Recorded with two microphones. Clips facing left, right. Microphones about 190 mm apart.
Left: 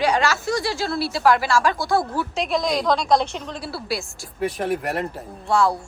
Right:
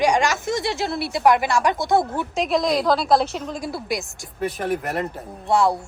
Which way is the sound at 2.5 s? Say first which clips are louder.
Right 2 dB; centre (ahead or behind).